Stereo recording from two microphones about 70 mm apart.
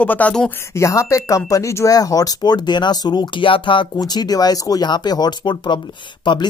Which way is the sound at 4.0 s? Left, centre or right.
Left.